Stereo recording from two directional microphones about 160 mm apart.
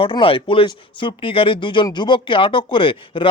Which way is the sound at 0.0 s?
35° left (ahead or behind).